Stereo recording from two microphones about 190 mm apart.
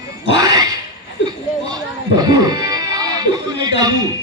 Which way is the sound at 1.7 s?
20° right (ahead or behind).